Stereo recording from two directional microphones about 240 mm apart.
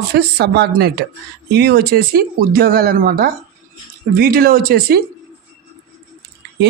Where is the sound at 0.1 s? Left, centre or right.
Right.